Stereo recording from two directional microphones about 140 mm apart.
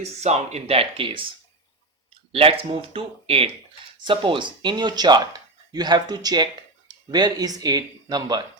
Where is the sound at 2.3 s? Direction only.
40° right (ahead or behind).